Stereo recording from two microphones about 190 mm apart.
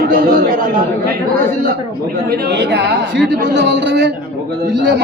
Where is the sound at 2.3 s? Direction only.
60° right (ahead or behind).